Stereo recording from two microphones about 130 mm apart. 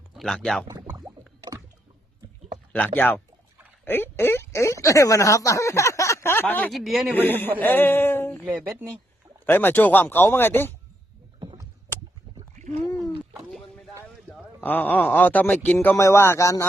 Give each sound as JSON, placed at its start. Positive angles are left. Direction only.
{"t": 0.2, "sound": "speech", "side_deg": 5}
{"t": 1.5, "sound": "rowboat", "side_deg": -35}
{"t": 2.7, "sound": "a man's voice", "side_deg": 15}
{"t": 6.7, "sound": "speech", "side_deg": 0}
{"t": 7.1, "sound": "a man's voice", "side_deg": 15}
{"t": 9.5, "sound": "a man's voice", "side_deg": 15}
{"t": 12.5, "sound": "a sound", "side_deg": -65}
{"t": 13.3, "sound": "a sound", "side_deg": 5}
{"t": 14.3, "sound": "a man's voice", "side_deg": 15}